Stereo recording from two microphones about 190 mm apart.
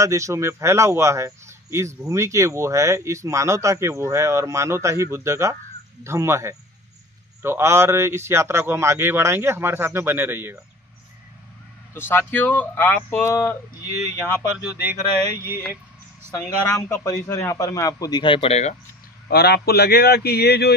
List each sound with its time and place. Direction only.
0.0 s speech: 15° right (ahead or behind)
11.9 s speech: 10° left (ahead or behind)
14.6 s speech: 10° right (ahead or behind)
16.3 s a man's voice: 15° left (ahead or behind); by 18.8 s 35° left (ahead or behind)
19.2 s a man's voice: 55° left (ahead or behind)